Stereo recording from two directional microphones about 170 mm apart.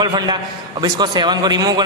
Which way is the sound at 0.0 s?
25° right (ahead or behind).